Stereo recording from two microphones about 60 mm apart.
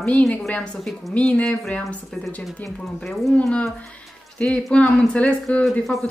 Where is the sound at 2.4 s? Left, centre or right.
Centre.